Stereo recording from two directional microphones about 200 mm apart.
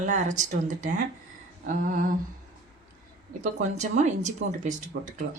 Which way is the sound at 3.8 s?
35° right (ahead or behind).